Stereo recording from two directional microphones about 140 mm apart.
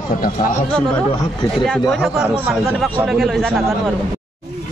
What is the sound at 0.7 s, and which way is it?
A man's voice, 5° left (ahead or behind).